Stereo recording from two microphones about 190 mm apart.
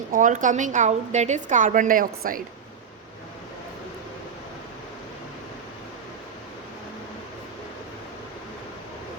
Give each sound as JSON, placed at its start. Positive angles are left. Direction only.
{"t": 0.1, "sound": "a woman's voice", "side_deg": -45}